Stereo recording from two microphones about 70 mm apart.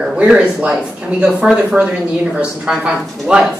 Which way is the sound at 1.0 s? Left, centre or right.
Centre.